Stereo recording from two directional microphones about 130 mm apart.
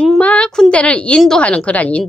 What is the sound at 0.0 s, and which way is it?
A woman's voice, 10° left (ahead or behind).